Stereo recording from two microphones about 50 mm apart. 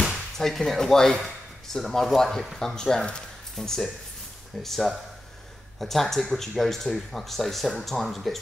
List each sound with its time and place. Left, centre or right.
0.0 s speech: centre